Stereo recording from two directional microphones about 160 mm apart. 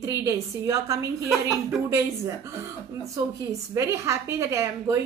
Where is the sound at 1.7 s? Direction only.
Centre (ahead or behind).